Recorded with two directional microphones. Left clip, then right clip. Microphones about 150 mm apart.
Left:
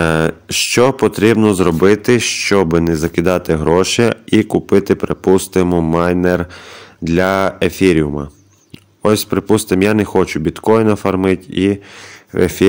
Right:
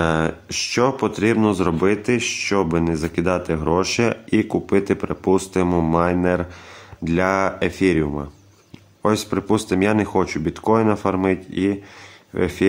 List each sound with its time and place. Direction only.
0.0 s speech: 35° left (ahead or behind)
7.1 s speech: 30° left (ahead or behind)